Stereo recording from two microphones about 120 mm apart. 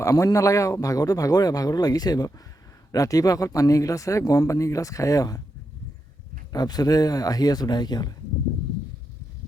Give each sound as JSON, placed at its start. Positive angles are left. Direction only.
{"t": 0.0, "sound": "speech", "side_deg": 30}
{"t": 6.5, "sound": "speech", "side_deg": 35}